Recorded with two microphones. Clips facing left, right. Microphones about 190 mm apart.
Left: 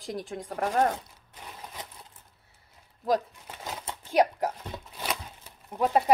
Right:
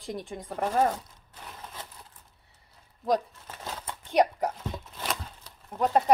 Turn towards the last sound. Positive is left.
turn(degrees=15)  # may be behind; listen again after turning